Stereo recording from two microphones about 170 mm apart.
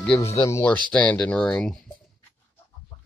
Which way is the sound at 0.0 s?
5° left (ahead or behind).